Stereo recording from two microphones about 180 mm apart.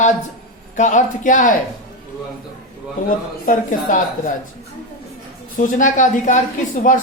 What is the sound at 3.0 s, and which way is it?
Speech, 45° left (ahead or behind).